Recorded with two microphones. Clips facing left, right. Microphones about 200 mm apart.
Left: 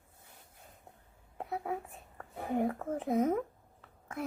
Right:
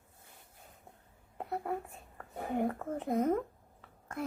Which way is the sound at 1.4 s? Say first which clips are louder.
Even; centre (ahead or behind).